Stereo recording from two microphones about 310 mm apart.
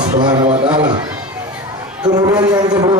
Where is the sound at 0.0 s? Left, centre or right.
Right.